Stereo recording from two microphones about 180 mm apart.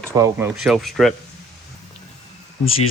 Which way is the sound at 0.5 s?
5° right (ahead or behind).